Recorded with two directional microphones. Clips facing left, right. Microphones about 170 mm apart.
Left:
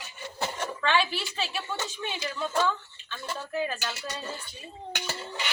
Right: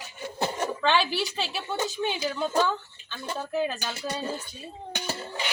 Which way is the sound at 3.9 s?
30° right (ahead or behind).